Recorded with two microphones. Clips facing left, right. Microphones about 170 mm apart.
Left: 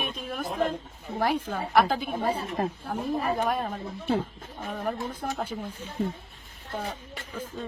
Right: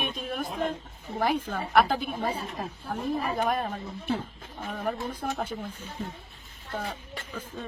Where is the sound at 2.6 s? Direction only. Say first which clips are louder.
Left 7 dB; 55° left (ahead or behind).